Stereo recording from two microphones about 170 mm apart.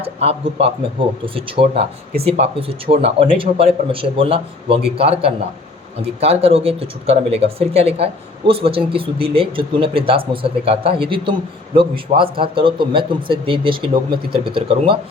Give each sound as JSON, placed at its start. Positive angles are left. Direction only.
{"t": 0.0, "sound": "speech", "side_deg": -35}